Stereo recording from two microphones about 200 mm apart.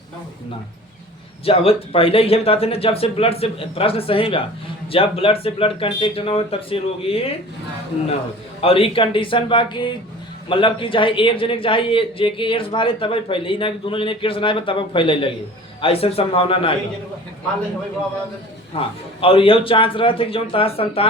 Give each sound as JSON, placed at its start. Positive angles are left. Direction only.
{"t": 1.5, "sound": "a man's voice", "side_deg": 30}
{"t": 8.6, "sound": "a man's voice", "side_deg": 30}
{"t": 18.7, "sound": "a man's voice", "side_deg": 30}